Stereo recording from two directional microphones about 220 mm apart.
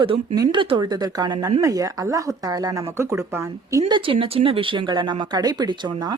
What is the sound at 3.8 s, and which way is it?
Speech, 25° right (ahead or behind).